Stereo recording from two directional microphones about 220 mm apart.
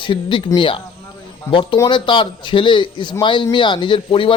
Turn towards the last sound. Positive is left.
turn(degrees=25)  # may be behind; listen again after turning